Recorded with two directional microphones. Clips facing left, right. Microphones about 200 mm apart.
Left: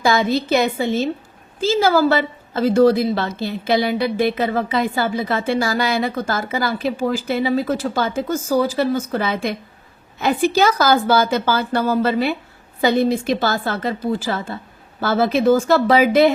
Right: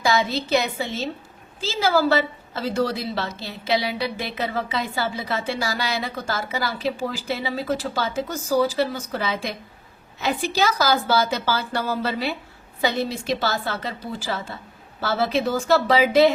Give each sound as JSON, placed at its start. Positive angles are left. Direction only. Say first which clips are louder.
{"t": 0.0, "sound": "a woman's voice", "louder": "left 5 dB", "side_deg": 55}